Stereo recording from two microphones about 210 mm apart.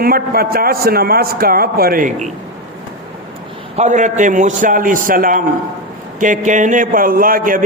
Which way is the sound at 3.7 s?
35° right (ahead or behind).